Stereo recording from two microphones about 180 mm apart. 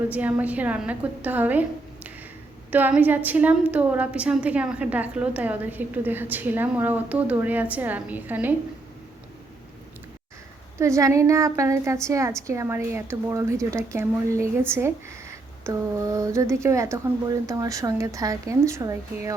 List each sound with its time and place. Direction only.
0.1 s a woman's voice: 10° right (ahead or behind)
2.6 s a woman's voice: 10° right (ahead or behind)
10.8 s a woman's voice: 15° right (ahead or behind)